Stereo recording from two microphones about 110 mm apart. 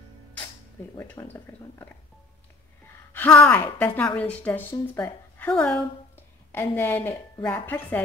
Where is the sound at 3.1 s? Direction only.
15° left (ahead or behind).